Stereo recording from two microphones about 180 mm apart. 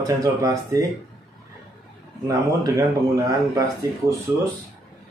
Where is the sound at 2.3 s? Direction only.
20° right (ahead or behind).